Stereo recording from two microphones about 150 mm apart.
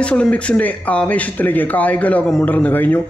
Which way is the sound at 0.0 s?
5° left (ahead or behind).